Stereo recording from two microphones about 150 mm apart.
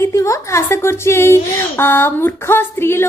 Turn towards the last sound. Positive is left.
turn(degrees=15)  # may be behind; listen again after turning